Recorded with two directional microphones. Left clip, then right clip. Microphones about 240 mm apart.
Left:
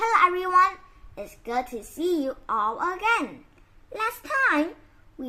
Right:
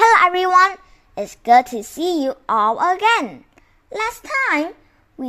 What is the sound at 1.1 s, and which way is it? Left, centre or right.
A woman's voice, right.